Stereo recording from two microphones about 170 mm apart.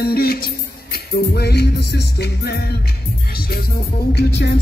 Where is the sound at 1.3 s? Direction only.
70° left (ahead or behind).